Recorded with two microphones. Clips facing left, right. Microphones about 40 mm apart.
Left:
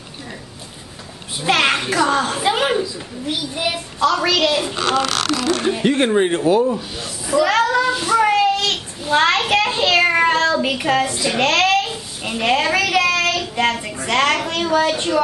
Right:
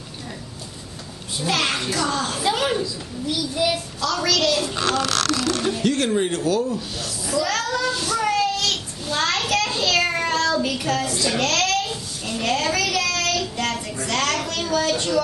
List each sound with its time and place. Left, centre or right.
1.4 s a child's voice: left